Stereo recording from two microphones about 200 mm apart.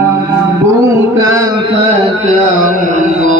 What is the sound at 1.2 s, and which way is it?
Music, 15° right (ahead or behind).